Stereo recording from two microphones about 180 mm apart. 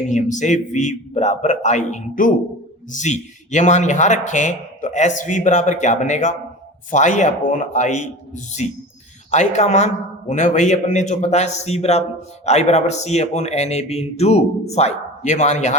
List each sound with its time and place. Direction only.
0.1 s a man's voice: 40° left (ahead or behind)